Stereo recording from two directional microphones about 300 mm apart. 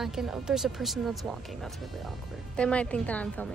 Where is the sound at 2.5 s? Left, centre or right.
Centre.